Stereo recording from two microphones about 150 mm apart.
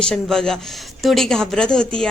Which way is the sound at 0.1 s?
5° left (ahead or behind).